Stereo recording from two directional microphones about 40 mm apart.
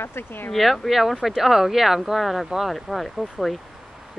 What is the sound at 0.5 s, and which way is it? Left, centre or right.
Speech, centre.